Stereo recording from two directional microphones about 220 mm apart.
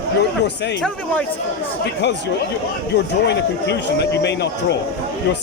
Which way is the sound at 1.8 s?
50° left (ahead or behind).